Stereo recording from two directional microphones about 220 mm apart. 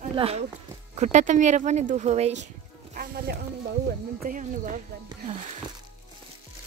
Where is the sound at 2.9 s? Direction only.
40° right (ahead or behind).